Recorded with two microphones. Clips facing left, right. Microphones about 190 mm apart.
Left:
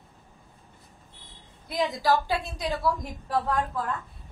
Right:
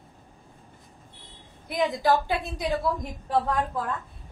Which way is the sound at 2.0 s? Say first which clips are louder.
Even; 15° right (ahead or behind).